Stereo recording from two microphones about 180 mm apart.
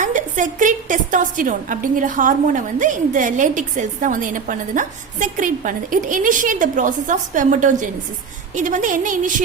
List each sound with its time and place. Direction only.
0.0 s a woman's voice: 45° right (ahead or behind)